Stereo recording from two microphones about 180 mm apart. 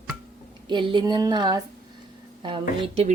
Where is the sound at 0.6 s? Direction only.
25° right (ahead or behind).